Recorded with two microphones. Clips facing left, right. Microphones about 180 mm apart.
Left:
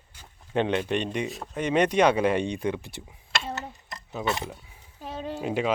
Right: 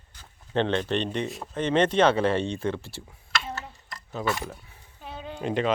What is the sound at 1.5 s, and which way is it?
Speech, 10° left (ahead or behind).